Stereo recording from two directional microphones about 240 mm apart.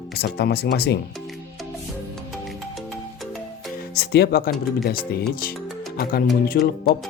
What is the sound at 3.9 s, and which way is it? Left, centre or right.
Speech, left.